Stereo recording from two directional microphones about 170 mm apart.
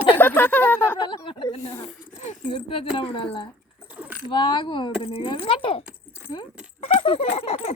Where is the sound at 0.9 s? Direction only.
30° left (ahead or behind).